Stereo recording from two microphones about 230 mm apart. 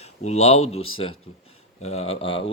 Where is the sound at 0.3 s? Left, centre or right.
Left.